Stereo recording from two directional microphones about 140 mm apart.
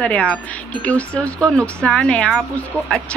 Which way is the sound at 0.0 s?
10° left (ahead or behind).